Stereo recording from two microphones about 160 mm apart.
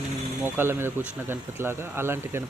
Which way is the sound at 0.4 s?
15° right (ahead or behind).